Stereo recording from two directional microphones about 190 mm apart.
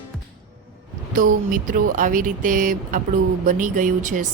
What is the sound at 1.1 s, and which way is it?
A woman's voice, 45° right (ahead or behind).